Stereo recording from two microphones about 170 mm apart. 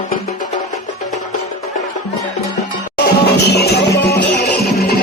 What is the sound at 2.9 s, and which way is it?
Music, 75° left (ahead or behind).